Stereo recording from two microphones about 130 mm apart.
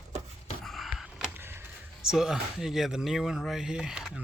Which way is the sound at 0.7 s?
Centre (ahead or behind).